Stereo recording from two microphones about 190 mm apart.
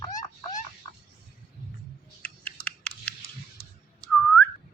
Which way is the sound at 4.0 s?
5° left (ahead or behind).